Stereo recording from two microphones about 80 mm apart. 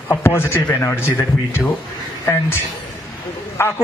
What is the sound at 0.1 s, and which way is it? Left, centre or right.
Speech, left.